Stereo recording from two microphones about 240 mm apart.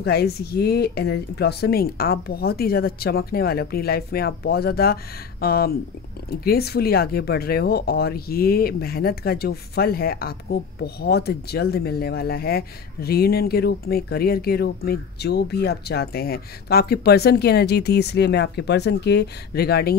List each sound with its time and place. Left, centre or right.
0.0 s speech: left